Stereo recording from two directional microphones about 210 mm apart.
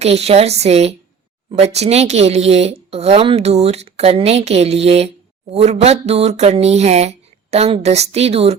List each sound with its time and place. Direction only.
0.0 s speech: 30° right (ahead or behind)